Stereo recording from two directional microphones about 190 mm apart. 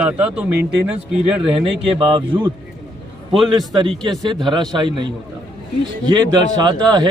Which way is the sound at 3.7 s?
25° right (ahead or behind).